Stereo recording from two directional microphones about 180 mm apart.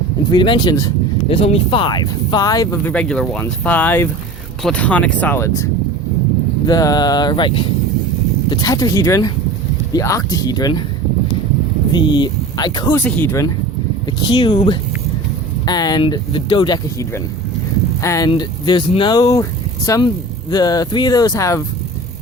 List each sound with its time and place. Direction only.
0.3 s speech: 25° left (ahead or behind)
2.8 s speech: 5° left (ahead or behind)
6.7 s speech: 20° left (ahead or behind)
11.9 s speech: 25° left (ahead or behind)
13.0 s speech: 10° left (ahead or behind)
14.2 s speech: 25° left (ahead or behind)